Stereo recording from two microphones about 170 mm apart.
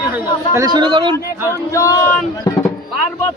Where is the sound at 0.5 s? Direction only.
25° right (ahead or behind).